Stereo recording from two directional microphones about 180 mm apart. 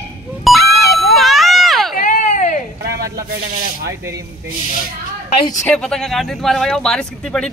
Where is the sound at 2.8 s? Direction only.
60° right (ahead or behind).